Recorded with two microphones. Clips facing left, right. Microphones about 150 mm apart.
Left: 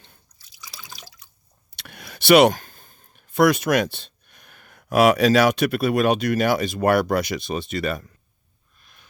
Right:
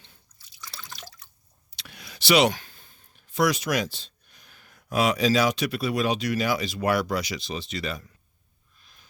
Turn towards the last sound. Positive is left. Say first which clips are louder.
# left 6 dB
turn(degrees=55)  # may be behind; listen again after turning